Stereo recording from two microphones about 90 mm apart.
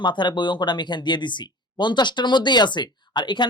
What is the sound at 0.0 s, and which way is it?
Speech, 60° left (ahead or behind).